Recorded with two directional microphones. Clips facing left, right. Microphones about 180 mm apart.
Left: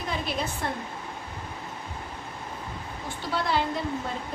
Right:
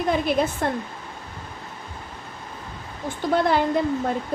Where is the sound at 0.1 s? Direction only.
55° right (ahead or behind).